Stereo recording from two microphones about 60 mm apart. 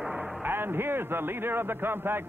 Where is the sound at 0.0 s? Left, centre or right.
Centre.